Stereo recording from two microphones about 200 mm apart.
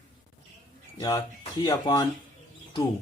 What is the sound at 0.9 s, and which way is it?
Speech, 20° left (ahead or behind).